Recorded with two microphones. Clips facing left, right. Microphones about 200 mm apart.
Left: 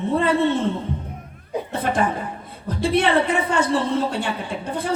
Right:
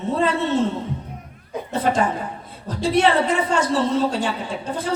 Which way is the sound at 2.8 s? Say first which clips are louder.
Right 1 dB; 60° left (ahead or behind).